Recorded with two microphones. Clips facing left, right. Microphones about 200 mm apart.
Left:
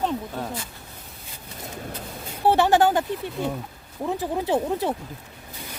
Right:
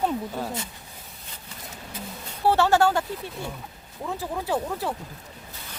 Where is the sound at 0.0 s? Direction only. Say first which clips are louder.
Even; 5° right (ahead or behind).